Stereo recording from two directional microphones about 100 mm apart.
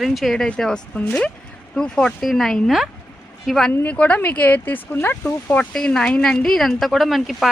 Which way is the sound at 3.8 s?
15° left (ahead or behind).